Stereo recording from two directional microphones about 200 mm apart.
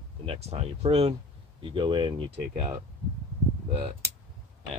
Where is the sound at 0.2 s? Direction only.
30° right (ahead or behind).